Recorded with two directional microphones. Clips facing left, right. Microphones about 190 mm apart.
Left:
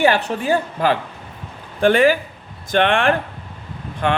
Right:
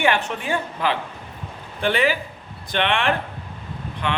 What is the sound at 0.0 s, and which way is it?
A woman's voice, 35° left (ahead or behind).